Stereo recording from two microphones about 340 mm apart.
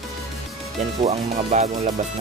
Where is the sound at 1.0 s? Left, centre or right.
Centre.